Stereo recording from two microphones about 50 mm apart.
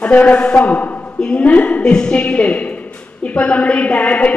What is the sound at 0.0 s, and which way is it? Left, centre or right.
A man's voice, left.